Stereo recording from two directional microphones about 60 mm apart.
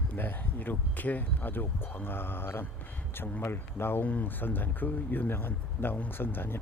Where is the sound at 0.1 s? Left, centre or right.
Left.